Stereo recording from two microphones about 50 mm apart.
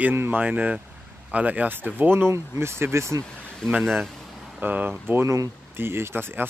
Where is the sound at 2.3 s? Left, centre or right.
Right.